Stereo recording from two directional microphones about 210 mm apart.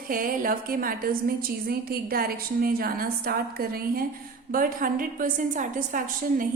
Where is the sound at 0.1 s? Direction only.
40° right (ahead or behind).